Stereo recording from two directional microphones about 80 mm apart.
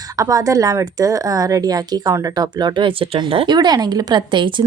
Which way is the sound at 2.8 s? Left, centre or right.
Right.